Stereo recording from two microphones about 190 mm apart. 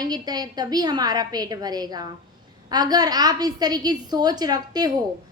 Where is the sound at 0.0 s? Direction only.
20° right (ahead or behind).